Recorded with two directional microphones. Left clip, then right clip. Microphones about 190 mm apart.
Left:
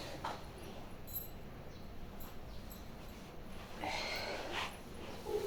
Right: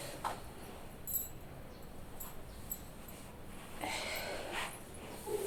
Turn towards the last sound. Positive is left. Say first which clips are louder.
# even
turn(degrees=0)  # may be behind; listen again after turning